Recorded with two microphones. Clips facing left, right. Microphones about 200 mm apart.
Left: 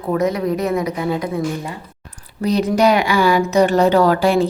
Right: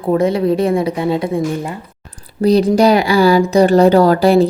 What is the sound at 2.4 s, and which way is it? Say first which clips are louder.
Speech: right 5 dB; 35° right (ahead or behind).